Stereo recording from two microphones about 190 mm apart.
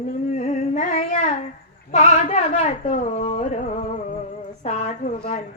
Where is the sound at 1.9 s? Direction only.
40° left (ahead or behind).